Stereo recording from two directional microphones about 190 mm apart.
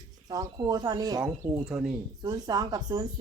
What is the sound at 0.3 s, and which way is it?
Speech, 20° right (ahead or behind).